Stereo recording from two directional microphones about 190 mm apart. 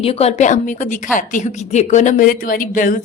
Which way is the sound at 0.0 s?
30° left (ahead or behind).